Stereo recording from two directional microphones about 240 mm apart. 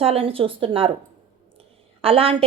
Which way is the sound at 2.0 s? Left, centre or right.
Right.